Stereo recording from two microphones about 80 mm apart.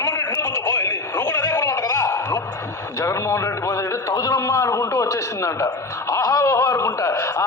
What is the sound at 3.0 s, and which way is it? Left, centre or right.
A man's voice, left.